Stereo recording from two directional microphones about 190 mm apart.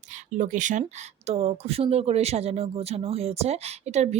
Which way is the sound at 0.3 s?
40° right (ahead or behind).